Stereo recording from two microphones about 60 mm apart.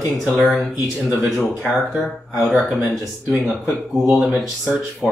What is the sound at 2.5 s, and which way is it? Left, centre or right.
A man's voice, centre.